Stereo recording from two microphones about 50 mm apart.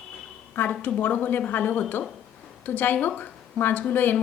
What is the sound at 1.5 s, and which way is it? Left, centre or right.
A woman's voice, left.